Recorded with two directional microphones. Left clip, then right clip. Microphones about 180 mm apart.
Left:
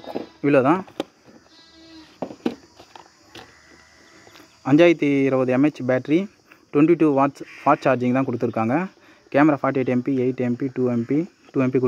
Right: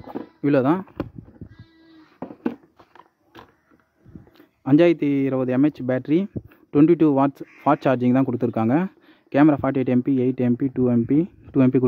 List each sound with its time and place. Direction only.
0.4 s speech: 40° right (ahead or behind)
4.4 s speech: 35° right (ahead or behind)